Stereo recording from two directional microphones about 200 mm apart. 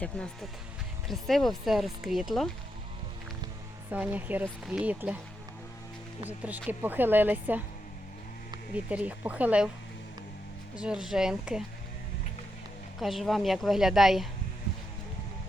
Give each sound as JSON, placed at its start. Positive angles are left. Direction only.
{"t": 0.1, "sound": "speech", "side_deg": 5}
{"t": 3.9, "sound": "speech", "side_deg": -10}
{"t": 6.2, "sound": "speech", "side_deg": -10}
{"t": 8.7, "sound": "speech", "side_deg": -5}
{"t": 10.8, "sound": "speech", "side_deg": -5}
{"t": 13.0, "sound": "speech", "side_deg": 0}